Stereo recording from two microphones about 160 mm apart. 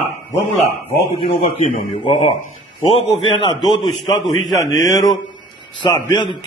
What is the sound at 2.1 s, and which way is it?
Speech, 50° left (ahead or behind).